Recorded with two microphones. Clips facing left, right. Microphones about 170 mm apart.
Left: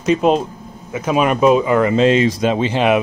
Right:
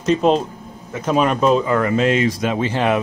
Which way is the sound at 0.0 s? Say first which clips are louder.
Left 1 dB; 5° left (ahead or behind).